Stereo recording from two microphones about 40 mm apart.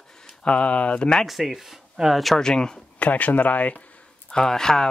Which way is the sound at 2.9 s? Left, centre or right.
Left.